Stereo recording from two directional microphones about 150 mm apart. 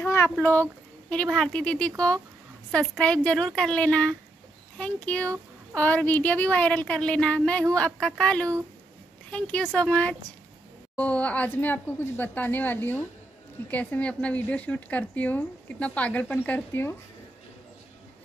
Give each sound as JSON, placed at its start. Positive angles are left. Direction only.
{"t": 0.0, "sound": "speech", "side_deg": 15}